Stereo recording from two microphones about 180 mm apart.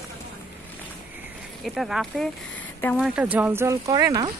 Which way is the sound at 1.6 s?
Centre (ahead or behind).